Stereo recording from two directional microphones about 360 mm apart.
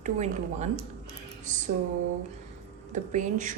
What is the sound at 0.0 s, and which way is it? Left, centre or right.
Speech, centre.